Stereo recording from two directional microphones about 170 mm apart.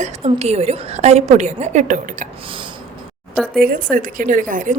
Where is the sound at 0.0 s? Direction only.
40° right (ahead or behind).